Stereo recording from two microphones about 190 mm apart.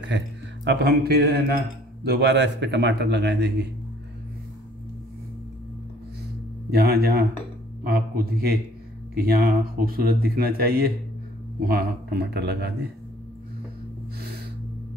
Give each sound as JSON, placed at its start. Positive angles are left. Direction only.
{"t": 0.7, "sound": "a man's voice", "side_deg": -60}
{"t": 6.7, "sound": "a man's voice", "side_deg": -55}